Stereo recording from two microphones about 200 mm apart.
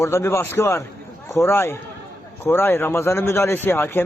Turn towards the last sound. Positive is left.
turn(degrees=10)  # may be behind; listen again after turning